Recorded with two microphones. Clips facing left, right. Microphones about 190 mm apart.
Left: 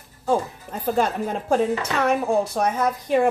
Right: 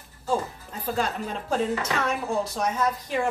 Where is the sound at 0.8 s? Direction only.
55° left (ahead or behind).